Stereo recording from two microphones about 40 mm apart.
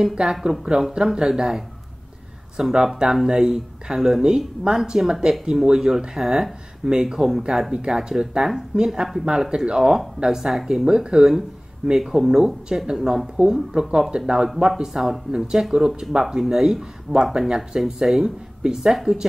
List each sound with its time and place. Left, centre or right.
0.2 s speech: centre
4.4 s speech: centre
10.9 s speech: centre
14.9 s speech: centre
15.3 s speech: centre